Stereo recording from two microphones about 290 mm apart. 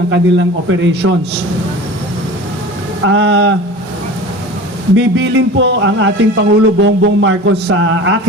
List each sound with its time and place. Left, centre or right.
0.1 s a man's voice: right
3.1 s a man's voice: right
4.9 s a man's voice: right